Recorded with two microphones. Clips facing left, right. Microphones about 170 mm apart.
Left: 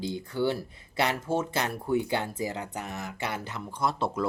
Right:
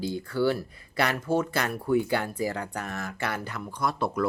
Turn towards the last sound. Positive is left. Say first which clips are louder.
# right 1 dB
turn(degrees=25)  # may be behind; listen again after turning